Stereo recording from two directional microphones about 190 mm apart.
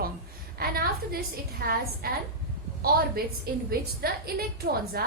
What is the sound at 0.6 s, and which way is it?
A woman's voice, 50° right (ahead or behind).